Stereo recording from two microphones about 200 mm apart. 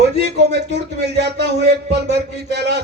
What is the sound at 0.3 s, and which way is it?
Speech, 55° right (ahead or behind).